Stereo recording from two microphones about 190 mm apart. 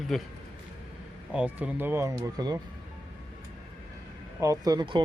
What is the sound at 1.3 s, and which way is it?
Speech, 10° right (ahead or behind).